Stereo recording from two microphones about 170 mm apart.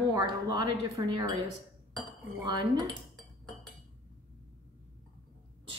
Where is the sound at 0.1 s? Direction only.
20° right (ahead or behind).